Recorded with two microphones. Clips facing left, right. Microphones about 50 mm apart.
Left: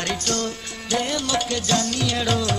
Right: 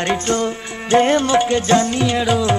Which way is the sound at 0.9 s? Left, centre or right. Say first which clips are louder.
Right 10 dB; right.